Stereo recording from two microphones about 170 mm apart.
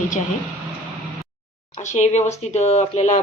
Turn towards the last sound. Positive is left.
turn(degrees=40)  # may be behind; listen again after turning